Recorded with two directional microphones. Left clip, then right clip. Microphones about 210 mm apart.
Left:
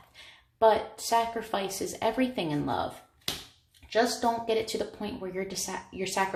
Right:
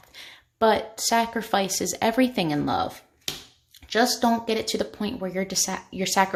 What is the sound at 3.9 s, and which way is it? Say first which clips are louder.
Speech: right 4 dB; 55° right (ahead or behind).